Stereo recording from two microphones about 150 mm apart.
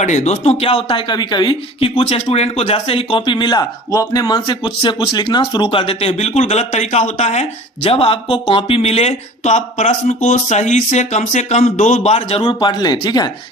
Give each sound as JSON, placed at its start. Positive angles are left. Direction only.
{"t": 0.0, "sound": "speech", "side_deg": 50}
{"t": 12.4, "sound": "speech", "side_deg": 30}